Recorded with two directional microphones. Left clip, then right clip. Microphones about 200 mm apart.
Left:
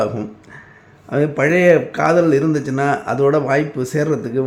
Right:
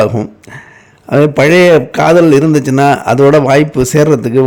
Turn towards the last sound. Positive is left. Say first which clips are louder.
# right 10 dB
turn(degrees=-50)  # may be behind; listen again after turning